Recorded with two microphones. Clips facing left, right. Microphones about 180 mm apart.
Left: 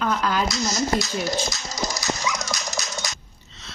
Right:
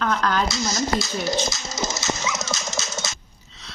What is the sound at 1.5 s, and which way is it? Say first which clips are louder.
Dog: right 1 dB; 20° right (ahead or behind).